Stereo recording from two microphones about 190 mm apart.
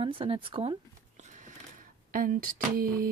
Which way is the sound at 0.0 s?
30° right (ahead or behind).